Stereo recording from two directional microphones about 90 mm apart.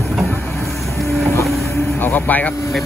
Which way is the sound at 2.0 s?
20° left (ahead or behind).